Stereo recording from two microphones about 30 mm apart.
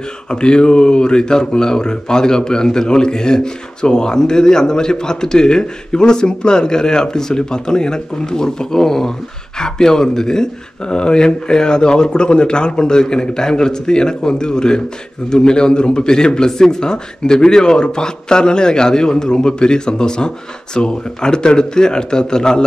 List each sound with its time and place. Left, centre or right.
0.3 s speech: left